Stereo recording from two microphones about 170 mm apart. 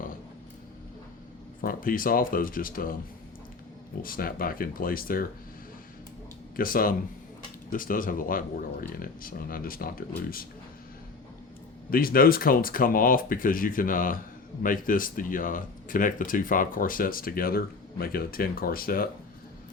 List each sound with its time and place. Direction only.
1.6 s speech: 55° left (ahead or behind)
4.0 s speech: 55° left (ahead or behind)
6.6 s speech: 55° left (ahead or behind)
11.9 s speech: 60° left (ahead or behind)